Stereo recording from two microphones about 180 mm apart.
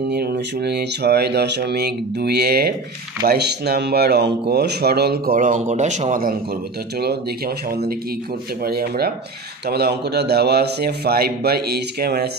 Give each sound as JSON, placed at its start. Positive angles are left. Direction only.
{"t": 0.1, "sound": "speech", "side_deg": -60}
{"t": 7.0, "sound": "speech", "side_deg": -60}